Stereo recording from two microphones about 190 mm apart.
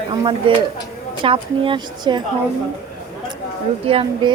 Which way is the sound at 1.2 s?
25° right (ahead or behind).